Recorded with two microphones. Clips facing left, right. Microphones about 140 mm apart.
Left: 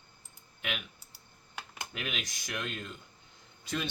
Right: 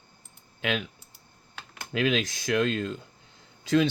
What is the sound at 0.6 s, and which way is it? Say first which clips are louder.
Speech: right 10 dB; 90° right.